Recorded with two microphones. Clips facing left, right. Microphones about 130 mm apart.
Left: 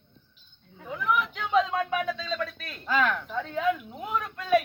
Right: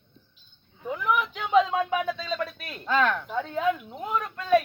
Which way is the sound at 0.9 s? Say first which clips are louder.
Right 1 dB; 5° right (ahead or behind).